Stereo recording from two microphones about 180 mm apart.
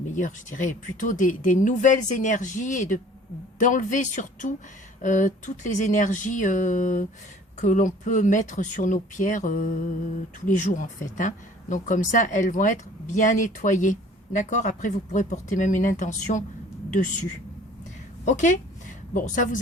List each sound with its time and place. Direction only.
0.1 s speech: 45° left (ahead or behind)
18.3 s speech: 45° left (ahead or behind)